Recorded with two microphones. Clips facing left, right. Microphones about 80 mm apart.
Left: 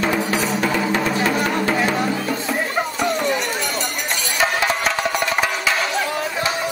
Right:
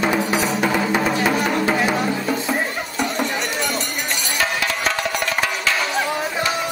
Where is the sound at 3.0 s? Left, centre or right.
Centre.